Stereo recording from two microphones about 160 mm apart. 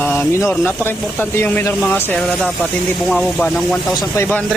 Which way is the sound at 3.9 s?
25° left (ahead or behind).